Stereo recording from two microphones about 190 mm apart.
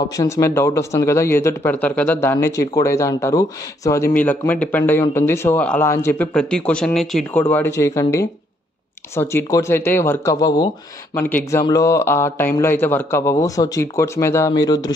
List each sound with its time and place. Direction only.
0.1 s speech: 15° left (ahead or behind)
11.1 s speech: 10° left (ahead or behind)